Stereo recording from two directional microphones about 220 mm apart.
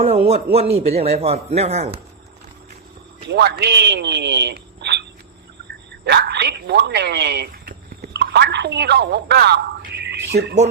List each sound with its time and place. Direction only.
0.5 s a man's voice: 30° right (ahead or behind)
3.2 s a man's voice: 50° right (ahead or behind)
6.1 s speech: 50° right (ahead or behind)